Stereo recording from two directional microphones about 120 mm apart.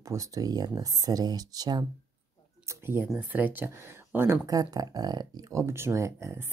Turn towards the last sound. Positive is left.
turn(degrees=-25)  # may be behind; listen again after turning